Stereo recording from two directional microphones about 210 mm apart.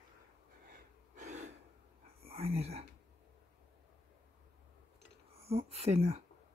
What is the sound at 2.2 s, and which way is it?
Whispering, 30° right (ahead or behind).